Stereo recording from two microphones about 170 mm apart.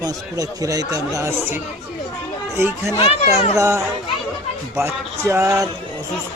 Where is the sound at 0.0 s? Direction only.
20° right (ahead or behind).